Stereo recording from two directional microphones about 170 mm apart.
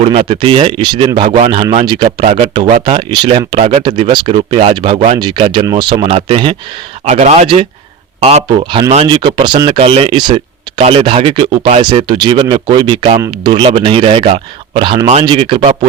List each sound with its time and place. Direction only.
0.0 s speech: 35° right (ahead or behind)
7.0 s speech: 40° right (ahead or behind); by 13.5 s 25° right (ahead or behind)
13.5 s speech: 35° right (ahead or behind)